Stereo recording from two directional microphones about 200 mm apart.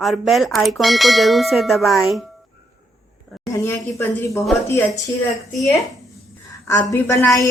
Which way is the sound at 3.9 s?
15° left (ahead or behind).